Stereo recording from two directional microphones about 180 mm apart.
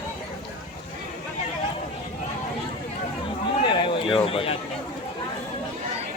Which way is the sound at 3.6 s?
25° left (ahead or behind).